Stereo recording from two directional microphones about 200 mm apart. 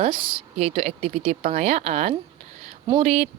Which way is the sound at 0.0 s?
25° right (ahead or behind).